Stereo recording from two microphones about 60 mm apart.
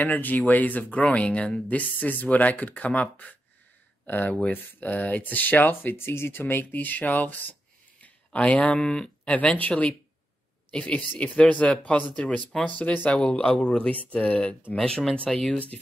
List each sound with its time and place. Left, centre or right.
0.0 s speech: left
1.7 s speech: left
6.6 s speech: left
13.2 s speech: centre
14.8 s speech: centre